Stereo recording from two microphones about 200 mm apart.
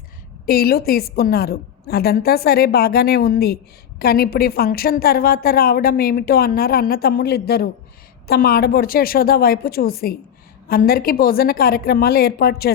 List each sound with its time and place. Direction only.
0.4 s a woman's voice: 50° left (ahead or behind)